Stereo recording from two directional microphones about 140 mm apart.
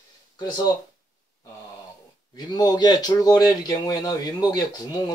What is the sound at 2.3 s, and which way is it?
Speech, 30° left (ahead or behind).